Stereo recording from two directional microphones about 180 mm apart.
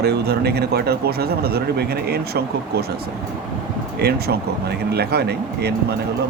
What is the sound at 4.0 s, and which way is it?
Speech, 60° right (ahead or behind).